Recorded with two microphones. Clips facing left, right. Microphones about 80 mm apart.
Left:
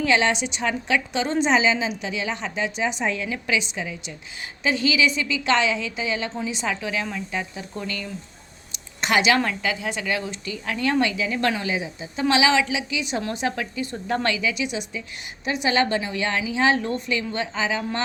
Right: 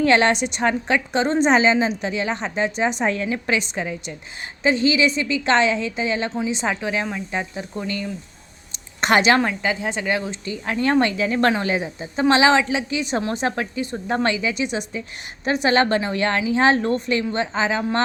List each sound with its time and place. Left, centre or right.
0.0 s a woman's voice: right
4.6 s a woman's voice: right
8.7 s a sound: right
9.4 s a woman's voice: right
12.3 s a woman's voice: right